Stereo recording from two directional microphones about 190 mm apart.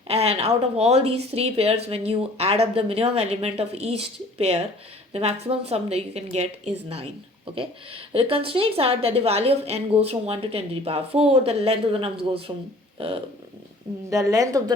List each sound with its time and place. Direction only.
0.1 s a woman's voice: 30° right (ahead or behind)
14.1 s a woman's voice: 15° right (ahead or behind)